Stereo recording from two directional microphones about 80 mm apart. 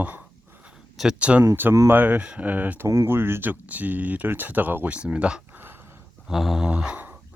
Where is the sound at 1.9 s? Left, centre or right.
Right.